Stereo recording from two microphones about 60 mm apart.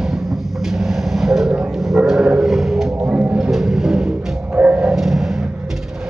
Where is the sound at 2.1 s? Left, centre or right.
Centre.